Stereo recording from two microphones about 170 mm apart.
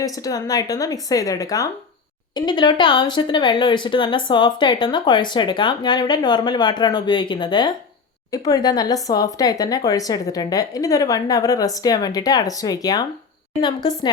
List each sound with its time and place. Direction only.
0.0 s speech: 20° left (ahead or behind)